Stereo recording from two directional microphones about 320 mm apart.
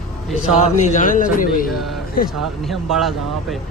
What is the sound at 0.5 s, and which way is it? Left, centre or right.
Speech, left.